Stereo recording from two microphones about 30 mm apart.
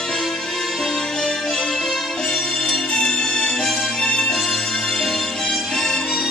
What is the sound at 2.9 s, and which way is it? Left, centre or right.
Music, left.